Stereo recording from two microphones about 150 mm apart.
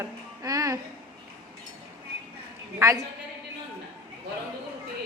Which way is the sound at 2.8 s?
20° right (ahead or behind).